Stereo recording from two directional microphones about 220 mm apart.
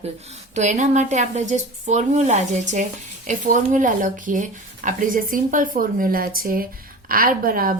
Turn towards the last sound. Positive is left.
turn(degrees=-40)  # may be behind; listen again after turning